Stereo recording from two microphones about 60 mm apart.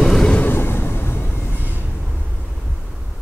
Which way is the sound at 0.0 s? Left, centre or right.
Centre.